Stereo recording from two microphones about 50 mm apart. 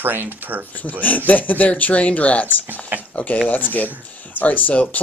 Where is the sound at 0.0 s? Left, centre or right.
Right.